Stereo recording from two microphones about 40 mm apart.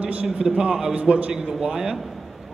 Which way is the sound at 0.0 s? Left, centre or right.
Right.